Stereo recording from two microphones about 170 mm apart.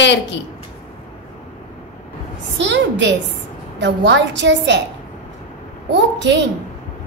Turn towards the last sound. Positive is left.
turn(degrees=-90)